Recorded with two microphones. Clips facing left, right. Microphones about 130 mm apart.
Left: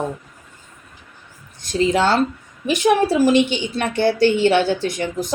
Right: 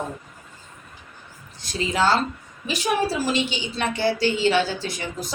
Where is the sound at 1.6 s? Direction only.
55° left (ahead or behind).